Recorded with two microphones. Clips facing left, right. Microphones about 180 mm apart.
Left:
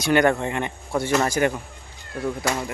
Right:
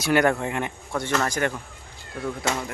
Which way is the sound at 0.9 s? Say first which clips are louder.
Left 4 dB; 10° left (ahead or behind).